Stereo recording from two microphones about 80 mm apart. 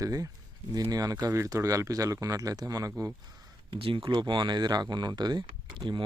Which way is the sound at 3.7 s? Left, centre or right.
Right.